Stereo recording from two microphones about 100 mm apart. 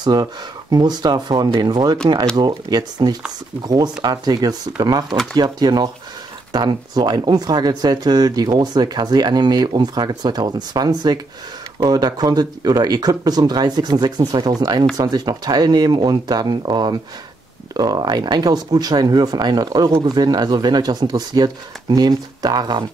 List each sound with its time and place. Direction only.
0.0 s speech: 40° right (ahead or behind)